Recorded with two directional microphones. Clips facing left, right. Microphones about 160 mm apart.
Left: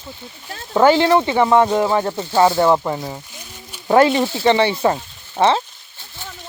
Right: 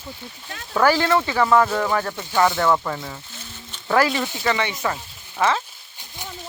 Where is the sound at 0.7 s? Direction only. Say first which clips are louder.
Left 5 dB; 20° left (ahead or behind).